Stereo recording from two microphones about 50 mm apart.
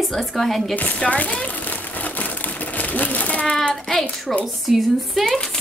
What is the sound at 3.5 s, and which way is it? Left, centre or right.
Speech, centre.